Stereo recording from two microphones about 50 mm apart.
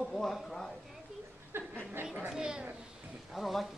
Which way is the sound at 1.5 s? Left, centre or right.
Right.